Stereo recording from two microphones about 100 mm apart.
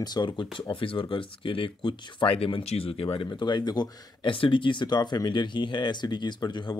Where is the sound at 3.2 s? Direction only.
50° left (ahead or behind).